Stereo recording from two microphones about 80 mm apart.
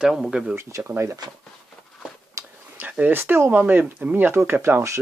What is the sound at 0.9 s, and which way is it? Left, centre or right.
Speech, right.